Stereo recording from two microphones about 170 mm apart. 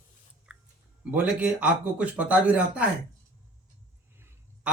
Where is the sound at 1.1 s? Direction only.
10° right (ahead or behind).